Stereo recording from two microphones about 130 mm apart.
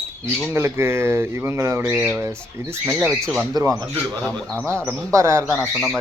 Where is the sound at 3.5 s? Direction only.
30° right (ahead or behind).